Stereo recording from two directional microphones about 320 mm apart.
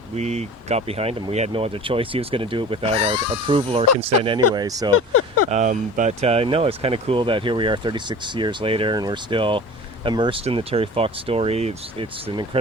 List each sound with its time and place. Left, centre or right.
0.2 s speech: right
3.2 s speech: left
3.4 s speech: centre
4.9 s speech: left
5.5 s speech: right